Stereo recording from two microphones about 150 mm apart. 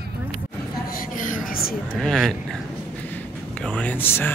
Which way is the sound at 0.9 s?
65° left (ahead or behind).